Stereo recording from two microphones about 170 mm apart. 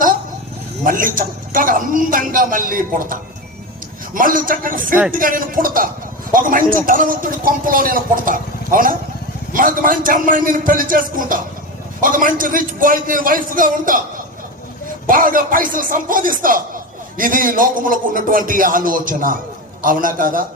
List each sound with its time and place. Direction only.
0.9 s a man's voice: 55° right (ahead or behind)
15.0 s a man's voice: 55° right (ahead or behind)